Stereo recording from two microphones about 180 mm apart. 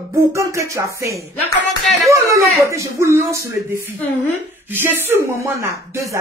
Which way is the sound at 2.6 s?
15° right (ahead or behind).